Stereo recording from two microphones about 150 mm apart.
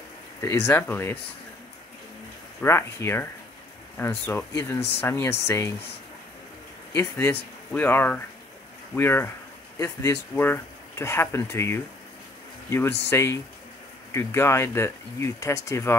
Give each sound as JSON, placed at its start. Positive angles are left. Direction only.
{"t": 0.4, "sound": "speech", "side_deg": 15}
{"t": 2.6, "sound": "speech", "side_deg": 15}
{"t": 7.0, "sound": "speech", "side_deg": 15}